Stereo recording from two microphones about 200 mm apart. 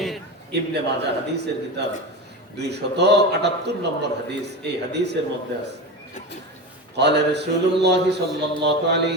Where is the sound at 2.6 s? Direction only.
55° right (ahead or behind).